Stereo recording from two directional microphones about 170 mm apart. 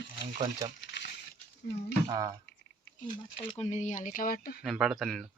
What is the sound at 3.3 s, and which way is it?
Speech, 40° left (ahead or behind).